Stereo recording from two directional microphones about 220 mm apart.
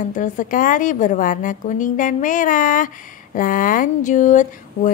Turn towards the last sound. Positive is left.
turn(degrees=35)  # may be behind; listen again after turning